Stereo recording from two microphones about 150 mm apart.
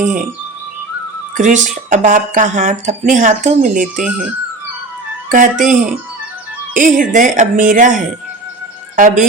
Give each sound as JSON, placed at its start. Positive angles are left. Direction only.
{"t": 0.0, "sound": "speech", "side_deg": -55}
{"t": 1.4, "sound": "speech", "side_deg": -55}
{"t": 5.3, "sound": "speech", "side_deg": -60}
{"t": 6.7, "sound": "a woman's voice", "side_deg": -60}